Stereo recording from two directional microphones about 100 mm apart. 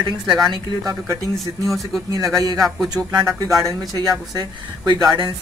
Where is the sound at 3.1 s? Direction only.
40° right (ahead or behind).